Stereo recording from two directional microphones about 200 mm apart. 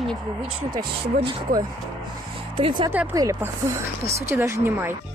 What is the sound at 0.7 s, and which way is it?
Speech, 20° right (ahead or behind).